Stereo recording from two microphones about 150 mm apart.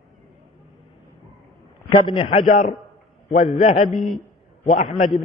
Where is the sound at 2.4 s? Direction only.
60° left (ahead or behind).